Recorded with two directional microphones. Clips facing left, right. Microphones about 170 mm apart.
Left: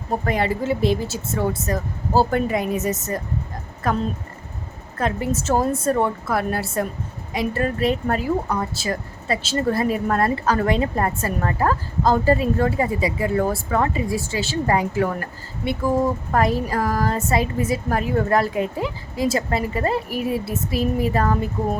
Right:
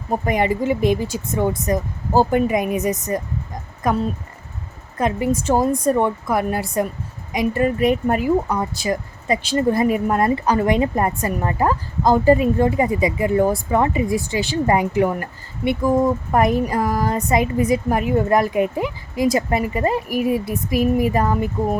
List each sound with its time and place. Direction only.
0.3 s speech: 15° right (ahead or behind)